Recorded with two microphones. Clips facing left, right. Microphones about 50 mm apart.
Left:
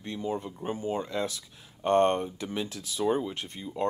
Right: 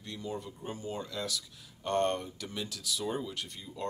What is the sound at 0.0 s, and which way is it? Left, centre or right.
Speech, left.